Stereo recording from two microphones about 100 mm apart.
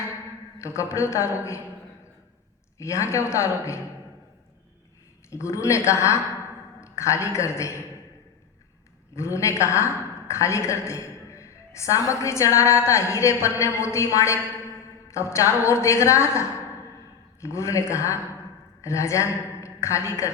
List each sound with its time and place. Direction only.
0.6 s a woman's voice: 30° left (ahead or behind)
2.7 s a woman's voice: 30° left (ahead or behind)
5.3 s a woman's voice: 30° left (ahead or behind)
9.1 s a woman's voice: 30° left (ahead or behind)